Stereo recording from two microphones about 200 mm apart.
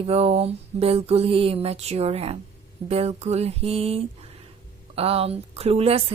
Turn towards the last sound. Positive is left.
turn(degrees=-30)  # may be behind; listen again after turning